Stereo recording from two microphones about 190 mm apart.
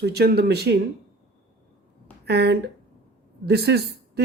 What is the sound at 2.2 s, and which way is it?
Speech, 60° right (ahead or behind).